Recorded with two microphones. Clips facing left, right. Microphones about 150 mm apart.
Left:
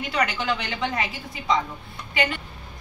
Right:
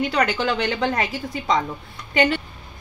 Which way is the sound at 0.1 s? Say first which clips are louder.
Right 4 dB; 40° right (ahead or behind).